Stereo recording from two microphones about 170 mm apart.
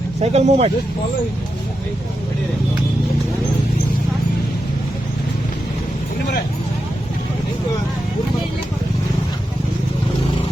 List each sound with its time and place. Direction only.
0.2 s speech: 40° right (ahead or behind)